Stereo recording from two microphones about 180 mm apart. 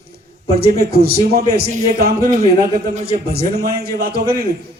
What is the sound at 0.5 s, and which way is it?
A man's voice, 60° right (ahead or behind).